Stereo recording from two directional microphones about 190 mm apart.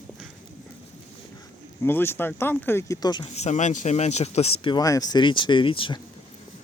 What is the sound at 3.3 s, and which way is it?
Speech, 35° left (ahead or behind).